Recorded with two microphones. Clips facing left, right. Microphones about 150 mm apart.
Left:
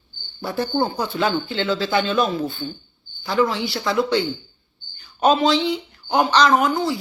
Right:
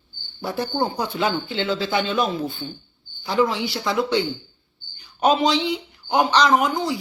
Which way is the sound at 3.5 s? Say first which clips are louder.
Left 1 dB; 15° right (ahead or behind).